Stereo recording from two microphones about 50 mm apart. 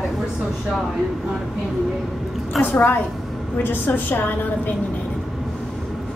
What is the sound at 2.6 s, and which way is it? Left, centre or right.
A woman's voice, left.